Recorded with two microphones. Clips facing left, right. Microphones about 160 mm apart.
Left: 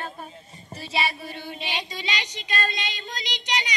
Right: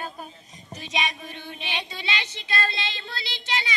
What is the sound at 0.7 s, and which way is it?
Speech, 5° left (ahead or behind).